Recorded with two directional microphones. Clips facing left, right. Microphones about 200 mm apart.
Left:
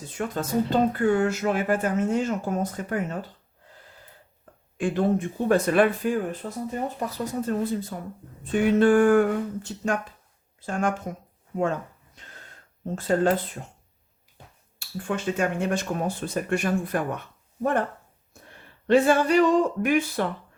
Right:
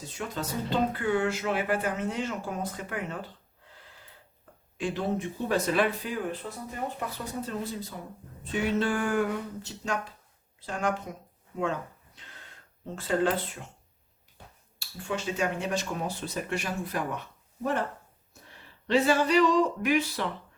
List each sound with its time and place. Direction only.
0.2 s speech: 50° left (ahead or behind)
4.8 s speech: 50° left (ahead or behind)
7.4 s speech: 50° left (ahead or behind)
11.5 s a sound: 45° left (ahead or behind)
13.0 s speech: 45° left (ahead or behind)
14.8 s speech: 55° left (ahead or behind)
18.9 s speech: 50° left (ahead or behind)